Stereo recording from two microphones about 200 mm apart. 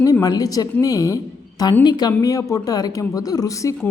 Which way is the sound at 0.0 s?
20° left (ahead or behind).